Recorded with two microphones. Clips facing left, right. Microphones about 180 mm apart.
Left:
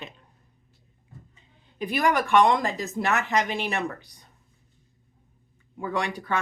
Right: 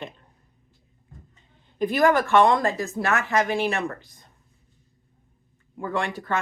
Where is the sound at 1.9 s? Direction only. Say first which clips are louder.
Right 2 dB; 15° left (ahead or behind).